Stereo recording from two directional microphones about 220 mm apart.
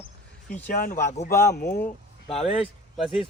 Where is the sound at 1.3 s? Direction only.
10° left (ahead or behind).